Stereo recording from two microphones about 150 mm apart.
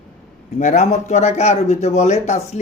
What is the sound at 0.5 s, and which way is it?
Speech, 50° left (ahead or behind).